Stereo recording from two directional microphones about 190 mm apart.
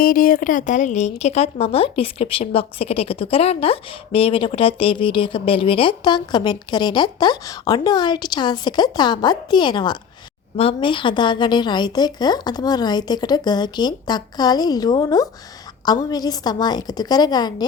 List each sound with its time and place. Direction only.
0.0 s speech: 50° left (ahead or behind); by 17.7 s 20° left (ahead or behind)